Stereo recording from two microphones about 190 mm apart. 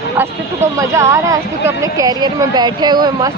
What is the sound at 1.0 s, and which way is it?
Speech, 15° right (ahead or behind).